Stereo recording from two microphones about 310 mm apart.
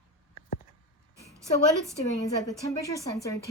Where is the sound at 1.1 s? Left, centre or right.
Centre.